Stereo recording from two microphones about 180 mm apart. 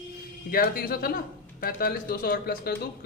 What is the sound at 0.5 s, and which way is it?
Speech, 55° left (ahead or behind).